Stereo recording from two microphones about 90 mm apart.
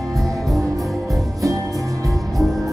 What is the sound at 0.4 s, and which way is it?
Music, 5° left (ahead or behind).